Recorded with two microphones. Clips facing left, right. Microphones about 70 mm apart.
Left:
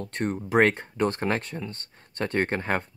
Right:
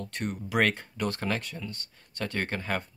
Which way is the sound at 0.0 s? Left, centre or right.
Left.